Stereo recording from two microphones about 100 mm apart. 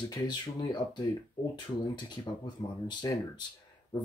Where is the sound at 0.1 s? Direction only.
40° left (ahead or behind).